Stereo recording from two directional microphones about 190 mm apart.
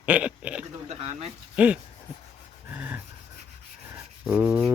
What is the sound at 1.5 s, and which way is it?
Speech, 5° right (ahead or behind).